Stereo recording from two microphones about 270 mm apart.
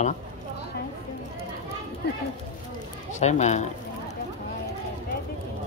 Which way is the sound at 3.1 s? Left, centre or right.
Left.